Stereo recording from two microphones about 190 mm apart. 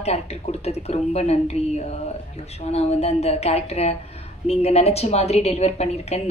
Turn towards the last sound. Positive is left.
turn(degrees=35)  # may be behind; listen again after turning